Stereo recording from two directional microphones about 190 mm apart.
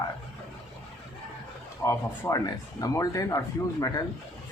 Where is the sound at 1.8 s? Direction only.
15° left (ahead or behind).